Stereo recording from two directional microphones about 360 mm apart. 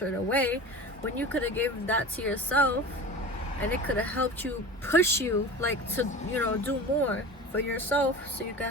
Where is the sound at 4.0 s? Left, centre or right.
Centre.